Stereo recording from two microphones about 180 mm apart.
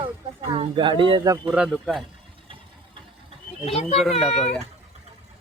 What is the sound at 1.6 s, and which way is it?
Speech, centre (ahead or behind).